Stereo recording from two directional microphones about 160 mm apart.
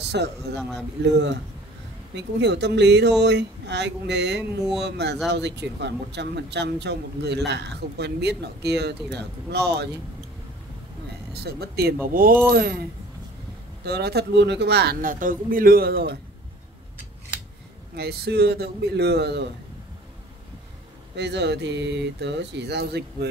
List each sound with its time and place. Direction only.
0.1 s speech: 90° right
0.6 s a man's voice: centre (ahead or behind)
1.0 s speech: 90° right
11.3 s speech: 90° right; by 12.4 s 60° right (ahead or behind)
12.4 s speech: 75° right (ahead or behind)
13.8 s speech: 90° right
17.9 s speech: 90° right
21.2 s speech: 90° right